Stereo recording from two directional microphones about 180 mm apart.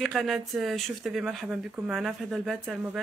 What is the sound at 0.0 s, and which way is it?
Speech, centre (ahead or behind).